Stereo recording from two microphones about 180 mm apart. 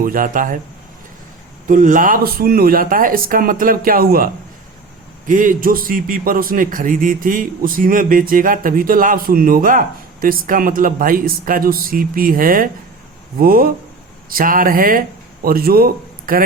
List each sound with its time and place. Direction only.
0.0 s a man's voice: 50° right (ahead or behind)
1.6 s a man's voice: 45° right (ahead or behind)
5.3 s a man's voice: 50° right (ahead or behind)